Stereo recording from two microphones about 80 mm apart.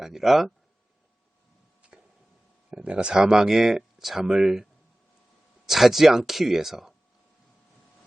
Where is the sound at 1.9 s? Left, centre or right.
Centre.